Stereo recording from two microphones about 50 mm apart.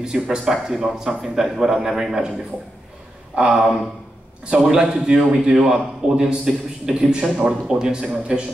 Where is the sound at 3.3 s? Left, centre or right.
Centre.